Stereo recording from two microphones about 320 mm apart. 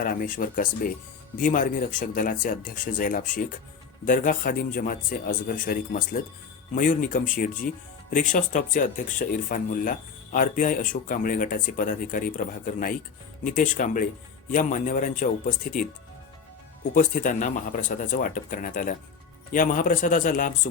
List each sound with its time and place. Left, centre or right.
0.0 s speech: left
16.9 s speech: left